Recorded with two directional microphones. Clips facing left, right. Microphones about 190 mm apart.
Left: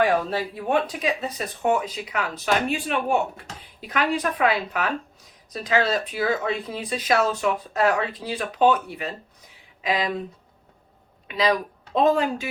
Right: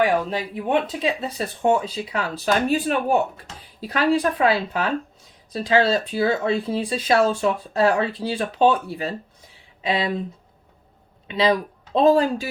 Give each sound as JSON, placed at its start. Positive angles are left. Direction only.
{"t": 0.0, "sound": "speech", "side_deg": -15}
{"t": 11.3, "sound": "speech", "side_deg": -25}